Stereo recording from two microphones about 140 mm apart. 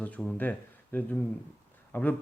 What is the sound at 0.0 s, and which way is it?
Speech, 10° left (ahead or behind).